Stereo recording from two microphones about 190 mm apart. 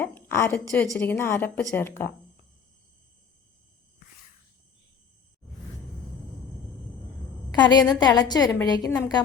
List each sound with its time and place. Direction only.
0.0 s a woman's voice: 10° left (ahead or behind)
7.5 s a woman's voice: 25° left (ahead or behind)